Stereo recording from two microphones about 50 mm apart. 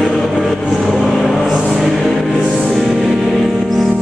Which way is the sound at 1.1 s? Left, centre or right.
Centre.